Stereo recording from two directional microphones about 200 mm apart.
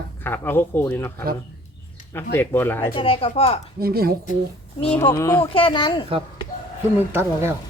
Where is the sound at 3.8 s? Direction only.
50° right (ahead or behind).